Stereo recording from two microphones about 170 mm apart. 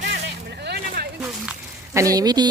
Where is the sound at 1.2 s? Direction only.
5° right (ahead or behind).